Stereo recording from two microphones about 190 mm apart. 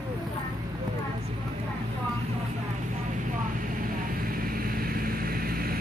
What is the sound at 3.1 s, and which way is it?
Vehicle, 45° right (ahead or behind).